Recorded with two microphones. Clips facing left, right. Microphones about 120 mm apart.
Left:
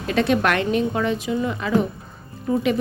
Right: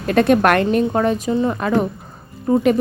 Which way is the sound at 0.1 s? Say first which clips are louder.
Right 6 dB; 50° right (ahead or behind).